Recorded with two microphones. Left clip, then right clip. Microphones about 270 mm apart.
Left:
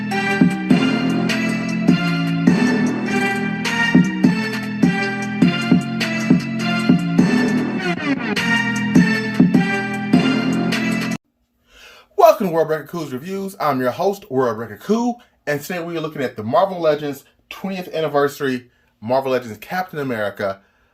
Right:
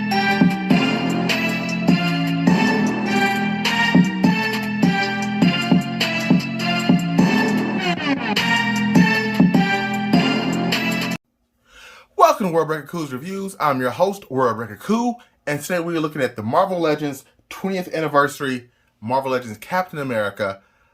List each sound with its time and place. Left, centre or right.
0.0 s music: left
12.1 s speech: centre